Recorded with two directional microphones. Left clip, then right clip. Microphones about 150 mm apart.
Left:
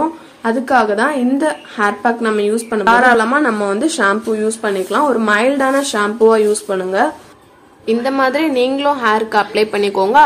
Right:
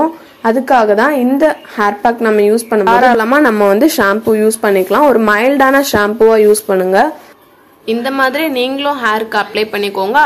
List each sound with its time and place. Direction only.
0.4 s speech: 30° right (ahead or behind)
7.8 s a woman's voice: 5° left (ahead or behind)